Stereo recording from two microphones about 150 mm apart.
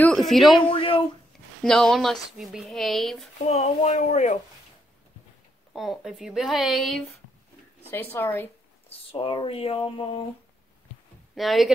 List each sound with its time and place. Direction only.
0.0 s a sound: 5° left (ahead or behind)
0.6 s a sound: 35° left (ahead or behind)
1.6 s speech: 5° left (ahead or behind)
3.4 s speech: 45° left (ahead or behind)
5.7 s speech: centre (ahead or behind)
7.8 s speech: 15° left (ahead or behind)
8.8 s speech: 40° left (ahead or behind)
11.3 s speech: centre (ahead or behind)